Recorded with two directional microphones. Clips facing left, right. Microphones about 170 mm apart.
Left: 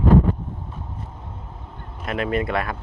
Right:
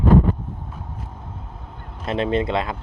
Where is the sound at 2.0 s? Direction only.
25° right (ahead or behind).